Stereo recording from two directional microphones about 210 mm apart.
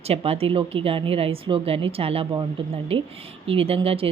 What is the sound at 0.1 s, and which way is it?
Speech, 30° right (ahead or behind).